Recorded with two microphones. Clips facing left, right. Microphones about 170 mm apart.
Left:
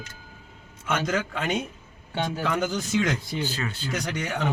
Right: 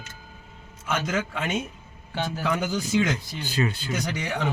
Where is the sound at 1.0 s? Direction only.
5° right (ahead or behind).